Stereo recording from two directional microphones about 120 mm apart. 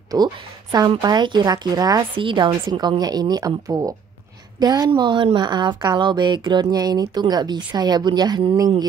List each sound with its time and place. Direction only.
0.1 s a woman's voice: 35° right (ahead or behind)
2.1 s a woman's voice: 45° right (ahead or behind)